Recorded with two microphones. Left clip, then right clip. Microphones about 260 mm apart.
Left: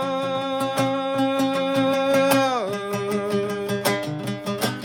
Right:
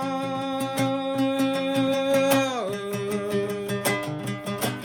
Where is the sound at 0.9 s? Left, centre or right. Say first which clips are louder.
Left 3 dB; left.